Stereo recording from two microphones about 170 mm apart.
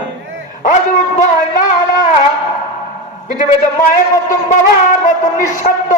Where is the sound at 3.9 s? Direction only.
45° left (ahead or behind).